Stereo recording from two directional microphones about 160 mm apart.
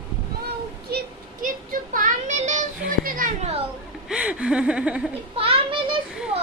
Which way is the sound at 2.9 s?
60° right (ahead or behind).